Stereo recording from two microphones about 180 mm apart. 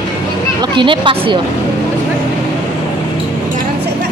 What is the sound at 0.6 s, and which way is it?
Speech, 25° right (ahead or behind).